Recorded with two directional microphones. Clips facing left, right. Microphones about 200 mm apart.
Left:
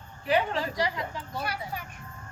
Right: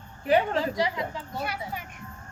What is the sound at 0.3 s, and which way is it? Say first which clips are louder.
Speech: right 3 dB; 45° right (ahead or behind).